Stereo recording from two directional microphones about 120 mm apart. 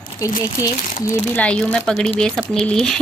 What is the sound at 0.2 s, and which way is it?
Speech, 25° left (ahead or behind).